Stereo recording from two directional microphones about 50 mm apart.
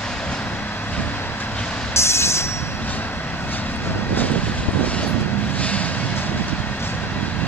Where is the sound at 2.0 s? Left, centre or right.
Left.